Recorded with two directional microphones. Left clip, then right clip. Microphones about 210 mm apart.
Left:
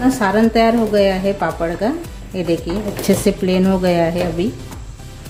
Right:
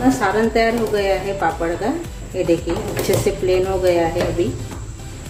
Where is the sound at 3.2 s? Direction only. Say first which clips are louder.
Left 1 dB; 45° left (ahead or behind).